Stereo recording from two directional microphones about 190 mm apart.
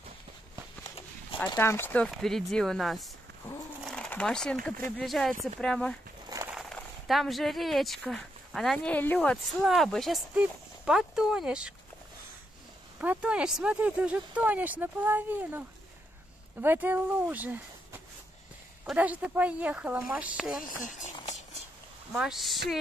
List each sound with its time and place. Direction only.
1.5 s speech: 15° left (ahead or behind)
3.8 s bird: 5° left (ahead or behind)
4.9 s speech: centre (ahead or behind)
6.2 s a sound: 15° right (ahead or behind)
6.5 s speech: centre (ahead or behind)
13.0 s speech: 5° right (ahead or behind)
16.6 s speech: 10° right (ahead or behind)
20.6 s a sound: 40° left (ahead or behind)
22.1 s speech: centre (ahead or behind)